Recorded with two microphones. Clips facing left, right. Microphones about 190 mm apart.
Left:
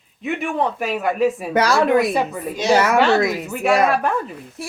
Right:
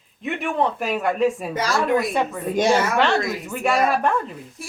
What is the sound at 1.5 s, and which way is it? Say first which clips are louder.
Speech: left 5 dB; 70° left (ahead or behind).